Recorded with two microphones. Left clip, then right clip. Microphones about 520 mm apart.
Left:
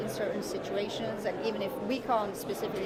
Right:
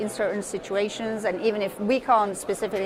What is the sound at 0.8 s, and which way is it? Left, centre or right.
A woman's voice, right.